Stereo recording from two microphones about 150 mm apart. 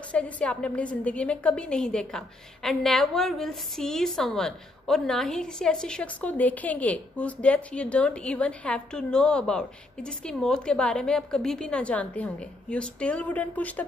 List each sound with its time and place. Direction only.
0.1 s a woman's voice: 10° left (ahead or behind)